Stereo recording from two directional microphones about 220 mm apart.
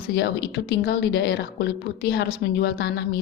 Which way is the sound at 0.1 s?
50° left (ahead or behind).